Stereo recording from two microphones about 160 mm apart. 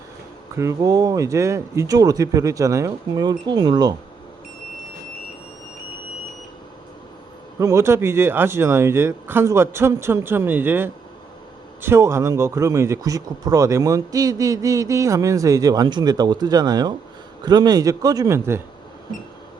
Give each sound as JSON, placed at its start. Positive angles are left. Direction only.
{"t": 0.5, "sound": "speech", "side_deg": -20}
{"t": 7.6, "sound": "speech", "side_deg": -20}